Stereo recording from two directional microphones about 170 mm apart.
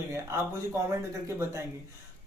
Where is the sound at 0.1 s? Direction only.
15° right (ahead or behind).